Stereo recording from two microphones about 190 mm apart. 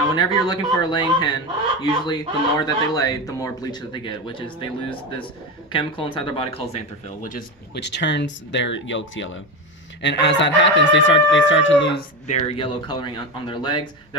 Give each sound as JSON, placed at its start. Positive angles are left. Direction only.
{"t": 0.2, "sound": "speech", "side_deg": 20}
{"t": 7.2, "sound": "speech", "side_deg": 45}
{"t": 7.7, "sound": "speech", "side_deg": 60}
{"t": 10.0, "sound": "speech", "side_deg": 70}
{"t": 11.9, "sound": "speech", "side_deg": 35}